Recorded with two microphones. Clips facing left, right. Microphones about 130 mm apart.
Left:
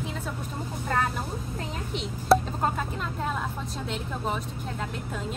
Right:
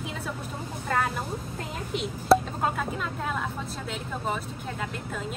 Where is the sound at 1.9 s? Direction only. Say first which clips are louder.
Right 1 dB; centre (ahead or behind).